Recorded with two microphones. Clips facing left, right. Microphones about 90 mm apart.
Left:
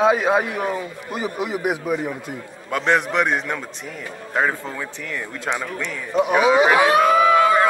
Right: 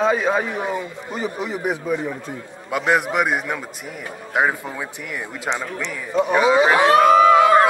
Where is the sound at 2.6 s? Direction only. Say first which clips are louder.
Even; 5° right (ahead or behind).